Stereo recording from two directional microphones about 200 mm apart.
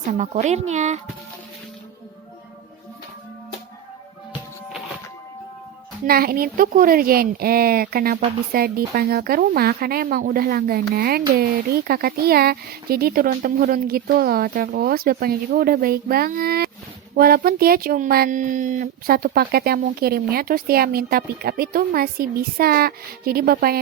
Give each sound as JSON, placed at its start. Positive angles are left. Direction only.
{"t": 0.1, "sound": "speech", "side_deg": -35}
{"t": 6.1, "sound": "speech", "side_deg": -50}